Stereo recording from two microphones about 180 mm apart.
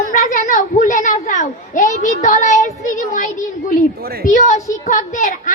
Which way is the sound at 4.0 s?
60° right (ahead or behind).